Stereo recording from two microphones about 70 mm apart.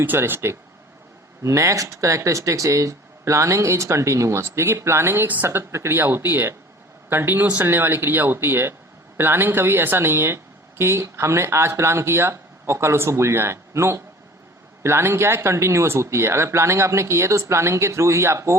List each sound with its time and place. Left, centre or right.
0.0 s speech: right
1.4 s speech: right